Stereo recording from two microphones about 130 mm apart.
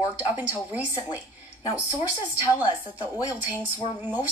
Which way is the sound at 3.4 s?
15° right (ahead or behind).